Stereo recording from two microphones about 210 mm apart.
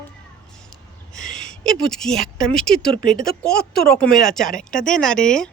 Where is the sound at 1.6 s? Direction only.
5° left (ahead or behind).